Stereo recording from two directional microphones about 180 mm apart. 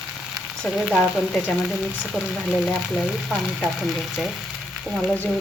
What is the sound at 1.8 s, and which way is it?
Speech, 5° right (ahead or behind).